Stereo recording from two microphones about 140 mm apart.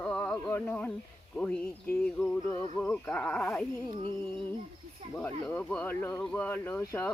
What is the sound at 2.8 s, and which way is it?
Speech, 15° left (ahead or behind).